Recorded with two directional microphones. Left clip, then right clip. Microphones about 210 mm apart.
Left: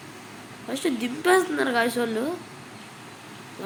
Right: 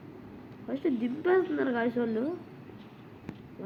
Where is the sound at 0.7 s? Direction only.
10° left (ahead or behind).